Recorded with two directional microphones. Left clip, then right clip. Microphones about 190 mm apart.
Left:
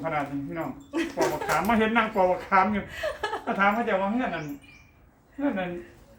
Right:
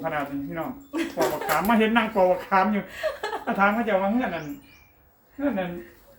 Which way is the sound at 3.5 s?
5° right (ahead or behind).